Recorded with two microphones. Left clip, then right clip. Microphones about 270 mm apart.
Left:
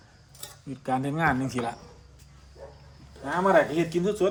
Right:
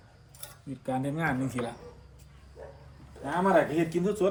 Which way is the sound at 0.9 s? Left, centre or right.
Left.